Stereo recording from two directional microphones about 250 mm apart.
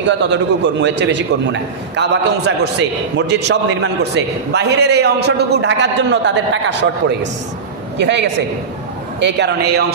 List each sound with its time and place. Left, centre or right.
0.2 s a man's voice: right
8.0 s a man's voice: right